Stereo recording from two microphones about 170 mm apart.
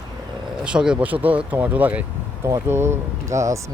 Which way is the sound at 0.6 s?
5° right (ahead or behind).